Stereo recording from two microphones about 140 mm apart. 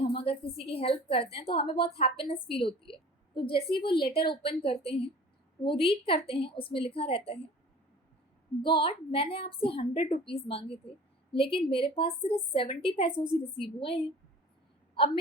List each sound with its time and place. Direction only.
0.0 s a woman's voice: 40° left (ahead or behind)
8.6 s a woman's voice: 35° left (ahead or behind)